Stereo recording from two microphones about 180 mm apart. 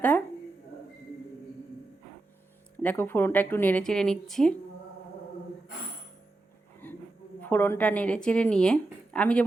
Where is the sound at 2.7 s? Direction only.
10° left (ahead or behind).